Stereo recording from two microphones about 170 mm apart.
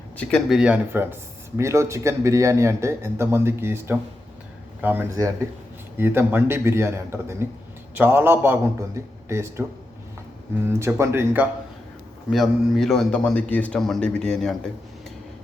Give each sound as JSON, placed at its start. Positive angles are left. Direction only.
{"t": 0.2, "sound": "speech", "side_deg": 5}
{"t": 10.7, "sound": "speech", "side_deg": -15}
{"t": 12.3, "sound": "a man's voice", "side_deg": 0}